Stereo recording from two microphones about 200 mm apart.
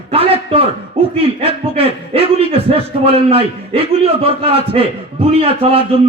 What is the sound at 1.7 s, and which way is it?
A man's voice, 30° right (ahead or behind).